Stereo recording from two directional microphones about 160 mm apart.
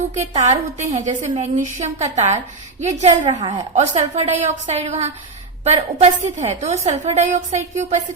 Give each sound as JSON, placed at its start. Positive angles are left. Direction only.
{"t": 0.1, "sound": "a woman's voice", "side_deg": -45}